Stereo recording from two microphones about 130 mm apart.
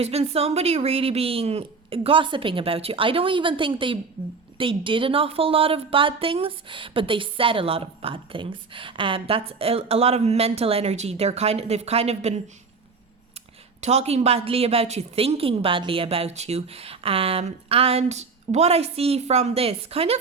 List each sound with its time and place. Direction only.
0.0 s a woman's voice: 55° right (ahead or behind)
13.8 s a woman's voice: 55° right (ahead or behind)